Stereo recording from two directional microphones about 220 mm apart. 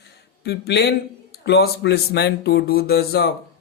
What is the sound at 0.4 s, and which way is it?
Speech, 45° left (ahead or behind).